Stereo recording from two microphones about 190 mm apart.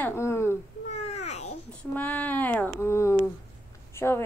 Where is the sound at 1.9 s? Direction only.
10° left (ahead or behind).